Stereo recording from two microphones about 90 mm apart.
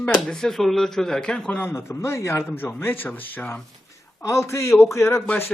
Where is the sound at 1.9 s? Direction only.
30° left (ahead or behind).